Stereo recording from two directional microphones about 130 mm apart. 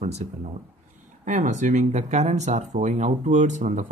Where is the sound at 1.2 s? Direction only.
70° right (ahead or behind).